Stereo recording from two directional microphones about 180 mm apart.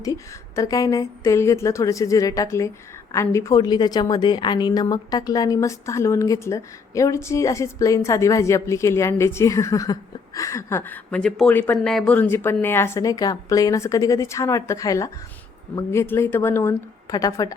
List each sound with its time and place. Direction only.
0.0 s speech: 20° left (ahead or behind)